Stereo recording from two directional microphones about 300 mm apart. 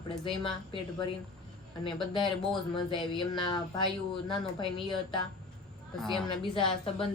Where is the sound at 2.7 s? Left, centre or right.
Centre.